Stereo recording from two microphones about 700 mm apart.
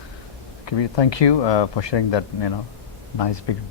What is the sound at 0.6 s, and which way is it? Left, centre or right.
A man's voice, left.